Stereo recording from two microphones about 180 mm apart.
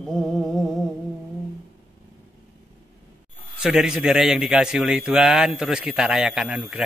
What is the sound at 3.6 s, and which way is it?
A man's voice, 5° right (ahead or behind).